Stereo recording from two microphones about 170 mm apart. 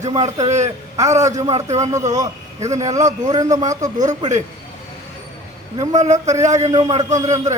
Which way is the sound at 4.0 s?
45° right (ahead or behind).